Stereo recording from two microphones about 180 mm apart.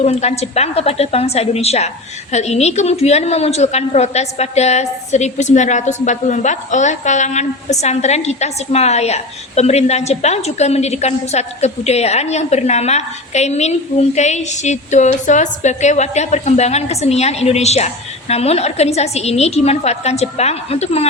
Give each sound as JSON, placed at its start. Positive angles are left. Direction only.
{"t": 0.0, "sound": "a woman's voice", "side_deg": 35}